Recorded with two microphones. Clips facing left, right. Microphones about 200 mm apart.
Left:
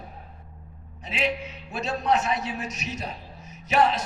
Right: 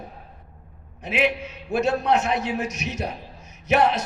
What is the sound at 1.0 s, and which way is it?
A man's voice, 60° right (ahead or behind).